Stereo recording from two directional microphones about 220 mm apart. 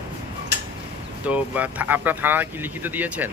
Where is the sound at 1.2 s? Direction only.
5° right (ahead or behind).